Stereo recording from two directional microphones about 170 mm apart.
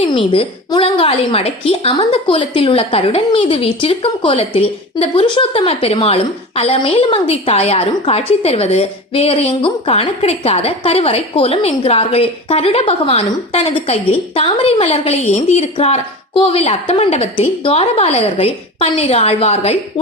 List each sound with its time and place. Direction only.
0.0 s a woman's voice: 30° left (ahead or behind)